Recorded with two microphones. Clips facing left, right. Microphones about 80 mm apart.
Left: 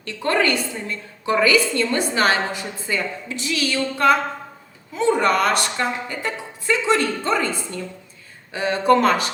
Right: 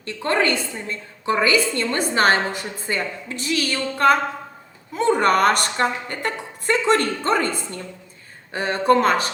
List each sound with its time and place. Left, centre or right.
0.0 s a woman's voice: right